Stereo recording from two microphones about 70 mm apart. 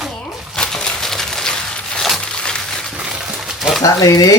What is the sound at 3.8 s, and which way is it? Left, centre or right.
Speech, left.